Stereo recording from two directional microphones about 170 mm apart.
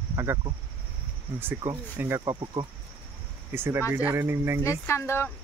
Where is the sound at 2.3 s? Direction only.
25° right (ahead or behind).